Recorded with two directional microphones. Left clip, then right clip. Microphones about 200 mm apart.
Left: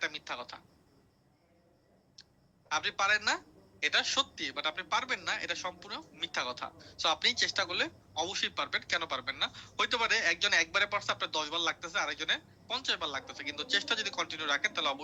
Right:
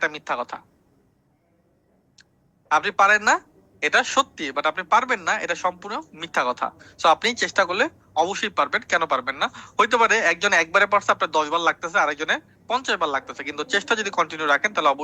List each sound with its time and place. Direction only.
0.0 s a woman's voice: 50° right (ahead or behind)
2.6 s a woman's voice: 50° right (ahead or behind)